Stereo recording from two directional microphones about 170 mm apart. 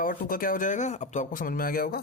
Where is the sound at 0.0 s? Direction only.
55° left (ahead or behind).